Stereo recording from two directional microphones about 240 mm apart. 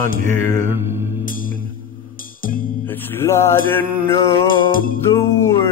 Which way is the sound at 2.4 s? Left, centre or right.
Left.